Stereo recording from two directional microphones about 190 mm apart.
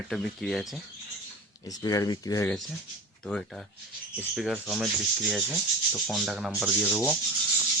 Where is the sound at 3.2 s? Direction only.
5° left (ahead or behind).